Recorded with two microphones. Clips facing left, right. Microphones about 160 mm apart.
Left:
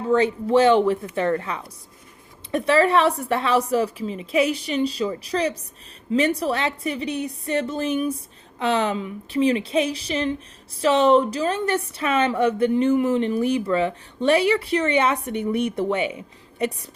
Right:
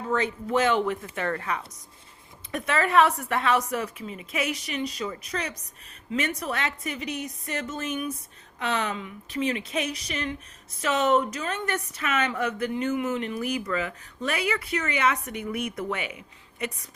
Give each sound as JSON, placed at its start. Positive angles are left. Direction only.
{"t": 0.1, "sound": "a woman's voice", "side_deg": 30}